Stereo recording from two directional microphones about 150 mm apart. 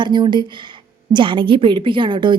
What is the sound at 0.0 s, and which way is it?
A woman's voice, 30° right (ahead or behind).